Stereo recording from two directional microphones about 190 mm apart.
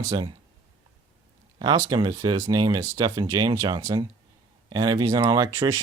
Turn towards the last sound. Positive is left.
turn(degrees=-15)  # may be behind; listen again after turning